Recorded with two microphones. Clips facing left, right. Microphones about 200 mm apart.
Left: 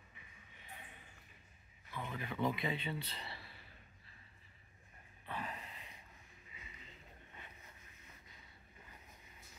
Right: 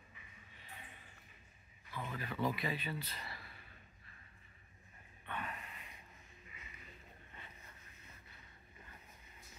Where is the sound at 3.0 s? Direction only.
30° left (ahead or behind).